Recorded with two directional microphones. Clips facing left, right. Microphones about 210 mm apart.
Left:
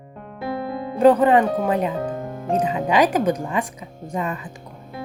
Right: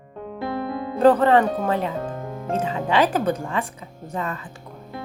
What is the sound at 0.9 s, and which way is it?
Speech, 15° left (ahead or behind).